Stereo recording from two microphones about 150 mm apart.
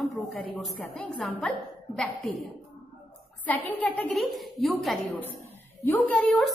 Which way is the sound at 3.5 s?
10° left (ahead or behind).